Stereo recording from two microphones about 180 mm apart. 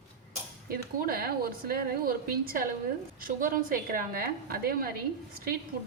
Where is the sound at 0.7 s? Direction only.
55° right (ahead or behind).